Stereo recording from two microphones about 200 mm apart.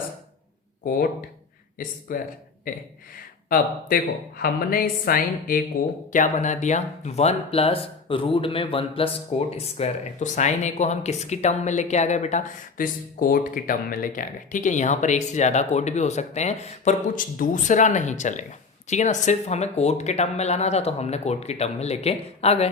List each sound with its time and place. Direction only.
0.9 s a woman's voice: 45° left (ahead or behind)
3.5 s a woman's voice: 45° left (ahead or behind)